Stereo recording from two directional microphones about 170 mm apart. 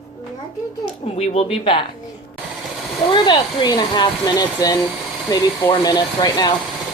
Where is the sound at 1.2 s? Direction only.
40° left (ahead or behind).